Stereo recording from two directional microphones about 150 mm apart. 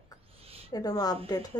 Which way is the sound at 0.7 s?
25° left (ahead or behind).